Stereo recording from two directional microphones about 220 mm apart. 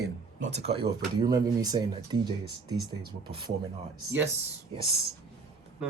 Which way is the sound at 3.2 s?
20° right (ahead or behind).